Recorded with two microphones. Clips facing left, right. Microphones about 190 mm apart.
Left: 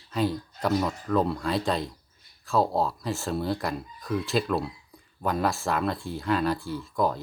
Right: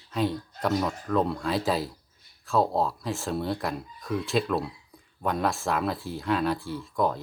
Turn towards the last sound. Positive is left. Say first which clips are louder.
# even
turn(degrees=0)  # may be behind; listen again after turning